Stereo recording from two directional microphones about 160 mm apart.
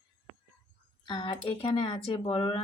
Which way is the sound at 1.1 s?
25° left (ahead or behind).